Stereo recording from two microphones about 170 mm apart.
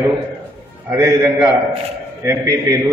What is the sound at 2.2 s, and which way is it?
Speech, 15° right (ahead or behind).